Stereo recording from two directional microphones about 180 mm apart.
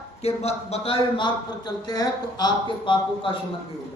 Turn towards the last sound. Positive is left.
turn(degrees=30)  # may be behind; listen again after turning